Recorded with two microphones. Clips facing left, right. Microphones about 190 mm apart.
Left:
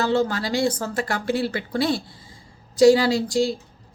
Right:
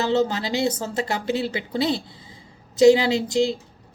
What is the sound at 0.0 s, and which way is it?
A woman's voice, 20° right (ahead or behind).